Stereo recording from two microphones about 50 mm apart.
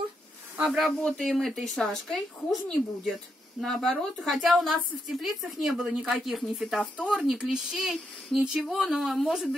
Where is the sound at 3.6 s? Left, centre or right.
Centre.